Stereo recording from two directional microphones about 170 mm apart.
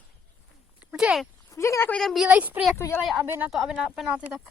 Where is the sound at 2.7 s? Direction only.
15° left (ahead or behind).